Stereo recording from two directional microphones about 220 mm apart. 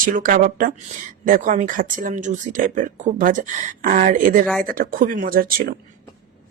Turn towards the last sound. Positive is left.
turn(degrees=-40)  # may be behind; listen again after turning